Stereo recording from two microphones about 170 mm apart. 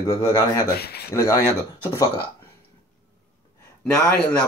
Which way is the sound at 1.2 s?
15° left (ahead or behind).